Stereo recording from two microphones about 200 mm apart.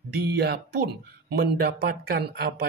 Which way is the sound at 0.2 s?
55° right (ahead or behind).